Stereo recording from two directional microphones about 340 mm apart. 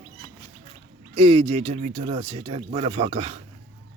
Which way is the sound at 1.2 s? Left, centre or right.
Centre.